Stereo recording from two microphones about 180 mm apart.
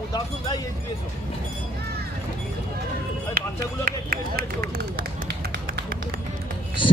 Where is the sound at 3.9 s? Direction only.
55° right (ahead or behind).